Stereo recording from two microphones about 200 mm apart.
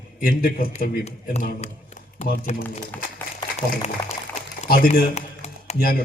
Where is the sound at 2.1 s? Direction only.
45° left (ahead or behind).